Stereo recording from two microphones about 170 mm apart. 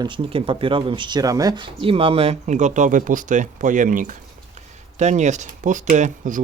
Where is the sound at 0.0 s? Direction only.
30° right (ahead or behind).